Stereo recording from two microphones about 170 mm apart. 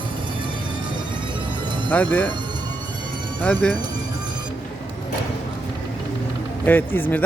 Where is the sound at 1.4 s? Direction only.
30° right (ahead or behind).